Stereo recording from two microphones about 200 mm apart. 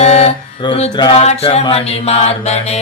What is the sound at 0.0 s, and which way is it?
Music, 30° left (ahead or behind).